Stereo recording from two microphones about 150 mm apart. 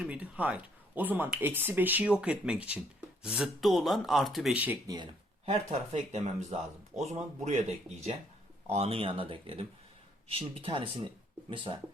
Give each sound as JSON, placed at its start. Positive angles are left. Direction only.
{"t": 0.0, "sound": "speech", "side_deg": -10}
{"t": 5.5, "sound": "speech", "side_deg": -45}